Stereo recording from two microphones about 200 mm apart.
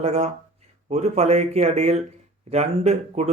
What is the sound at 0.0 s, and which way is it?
A man's voice, 35° right (ahead or behind).